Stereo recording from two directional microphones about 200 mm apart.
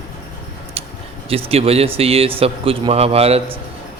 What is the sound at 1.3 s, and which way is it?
A man's voice, 30° right (ahead or behind).